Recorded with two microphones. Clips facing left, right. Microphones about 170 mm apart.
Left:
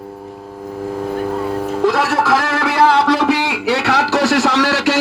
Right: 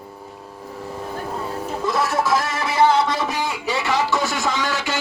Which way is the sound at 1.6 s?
70° left (ahead or behind).